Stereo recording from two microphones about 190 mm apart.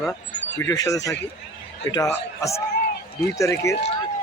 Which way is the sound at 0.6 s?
15° left (ahead or behind).